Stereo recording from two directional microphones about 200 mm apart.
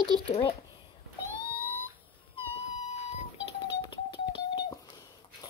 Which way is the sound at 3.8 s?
25° left (ahead or behind).